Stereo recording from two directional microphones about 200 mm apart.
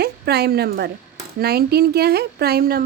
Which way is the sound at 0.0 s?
55° right (ahead or behind).